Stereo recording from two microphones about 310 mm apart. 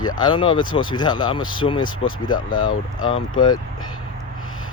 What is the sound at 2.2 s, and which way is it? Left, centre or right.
Speech, left.